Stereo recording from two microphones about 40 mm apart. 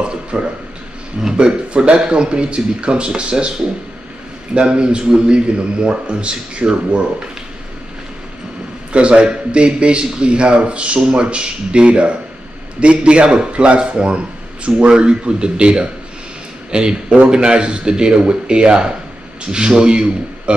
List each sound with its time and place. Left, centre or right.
0.0 s a sound: right
1.3 s a man's voice: right
8.9 s a man's voice: right